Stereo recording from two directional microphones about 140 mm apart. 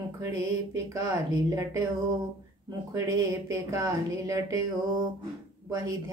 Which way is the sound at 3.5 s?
25° right (ahead or behind).